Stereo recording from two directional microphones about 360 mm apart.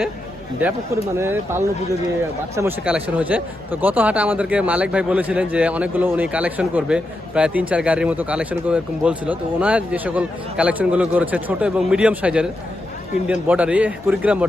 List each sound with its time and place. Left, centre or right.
1.1 s a man's voice: centre